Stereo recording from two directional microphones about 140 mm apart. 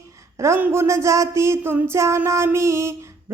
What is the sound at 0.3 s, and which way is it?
Speech, 20° right (ahead or behind).